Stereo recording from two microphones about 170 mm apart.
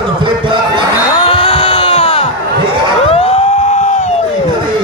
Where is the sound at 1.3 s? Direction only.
35° left (ahead or behind).